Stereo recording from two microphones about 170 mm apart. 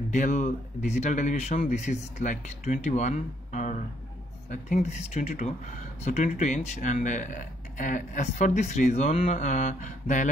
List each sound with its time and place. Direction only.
0.1 s speech: 45° left (ahead or behind)
4.8 s speech: 40° left (ahead or behind)